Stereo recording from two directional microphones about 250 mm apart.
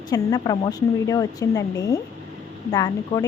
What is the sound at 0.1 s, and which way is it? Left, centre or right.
Speech, centre.